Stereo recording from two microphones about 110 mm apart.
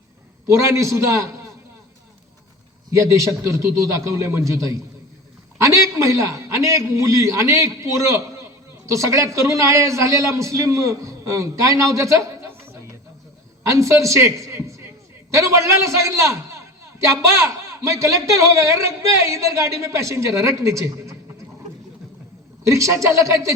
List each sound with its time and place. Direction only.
0.4 s a man's voice: 25° right (ahead or behind)
2.9 s a man's voice: 30° right (ahead or behind)
11.9 s a sound: 30° right (ahead or behind)
13.7 s a woman's voice: 30° right (ahead or behind)
22.6 s a man's voice: 25° right (ahead or behind)